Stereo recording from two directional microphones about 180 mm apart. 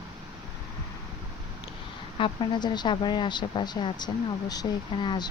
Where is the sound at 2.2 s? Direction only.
25° left (ahead or behind).